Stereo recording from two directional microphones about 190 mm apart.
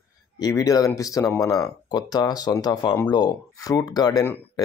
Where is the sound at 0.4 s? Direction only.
20° left (ahead or behind).